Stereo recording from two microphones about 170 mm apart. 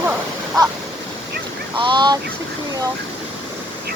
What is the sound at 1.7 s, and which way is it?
Speech, 25° right (ahead or behind).